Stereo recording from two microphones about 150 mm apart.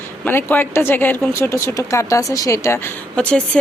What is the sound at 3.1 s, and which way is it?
Speech, 5° left (ahead or behind).